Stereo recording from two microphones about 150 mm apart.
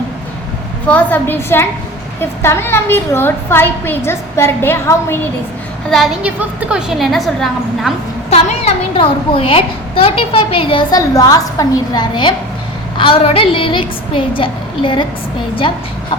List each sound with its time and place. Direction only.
0.9 s a woman's voice: 10° left (ahead or behind)
5.9 s a woman's voice: centre (ahead or behind)
8.3 s a woman's voice: 40° left (ahead or behind)